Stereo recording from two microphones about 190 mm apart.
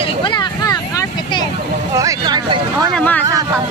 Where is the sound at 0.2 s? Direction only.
25° left (ahead or behind).